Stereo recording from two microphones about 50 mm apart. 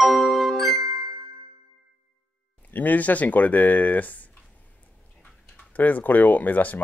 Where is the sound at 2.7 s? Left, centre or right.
Left.